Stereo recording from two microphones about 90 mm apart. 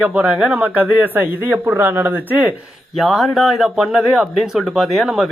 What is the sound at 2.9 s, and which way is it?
Speech, centre (ahead or behind).